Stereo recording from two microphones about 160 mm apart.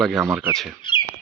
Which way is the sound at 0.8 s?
30° left (ahead or behind).